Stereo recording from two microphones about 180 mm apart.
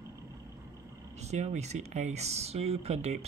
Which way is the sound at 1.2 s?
40° right (ahead or behind).